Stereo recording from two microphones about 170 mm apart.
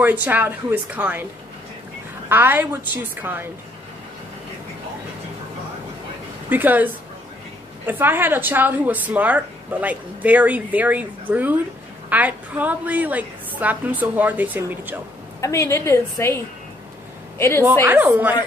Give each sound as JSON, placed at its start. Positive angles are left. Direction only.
{"t": 0.0, "sound": "a woman's voice", "side_deg": -10}
{"t": 2.2, "sound": "a woman's voice", "side_deg": -10}
{"t": 6.5, "sound": "a woman's voice", "side_deg": -10}
{"t": 15.4, "sound": "a woman's voice", "side_deg": 15}
{"t": 17.4, "sound": "a woman's voice", "side_deg": 15}
{"t": 17.8, "sound": "a woman's voice", "side_deg": -10}